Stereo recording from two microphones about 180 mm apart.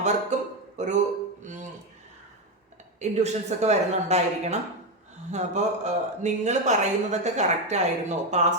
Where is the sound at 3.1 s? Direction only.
40° right (ahead or behind).